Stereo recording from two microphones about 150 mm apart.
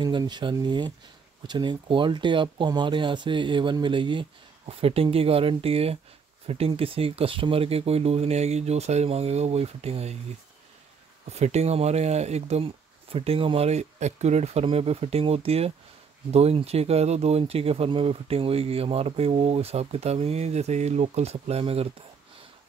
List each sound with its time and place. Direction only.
0.0 s speech: 30° right (ahead or behind)
11.2 s speech: 45° right (ahead or behind)